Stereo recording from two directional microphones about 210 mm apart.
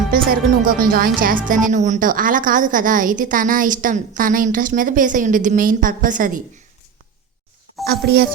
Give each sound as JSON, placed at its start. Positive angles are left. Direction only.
{"t": 0.1, "sound": "speech", "side_deg": -45}
{"t": 7.9, "sound": "speech", "side_deg": -50}